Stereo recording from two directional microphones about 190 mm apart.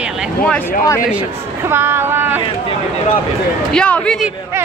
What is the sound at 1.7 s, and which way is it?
Speech, 10° right (ahead or behind).